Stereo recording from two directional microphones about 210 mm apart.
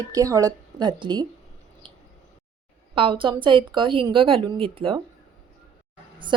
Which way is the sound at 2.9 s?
25° right (ahead or behind).